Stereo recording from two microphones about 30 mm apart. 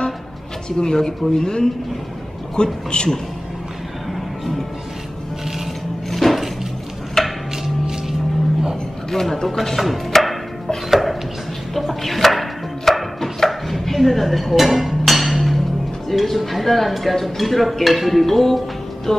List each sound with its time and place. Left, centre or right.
0.7 s speech: left
6.0 s a sound: centre
9.1 s speech: centre
9.6 s chopping: centre
14.9 s music: centre
16.1 s speech: centre
19.1 s speech: centre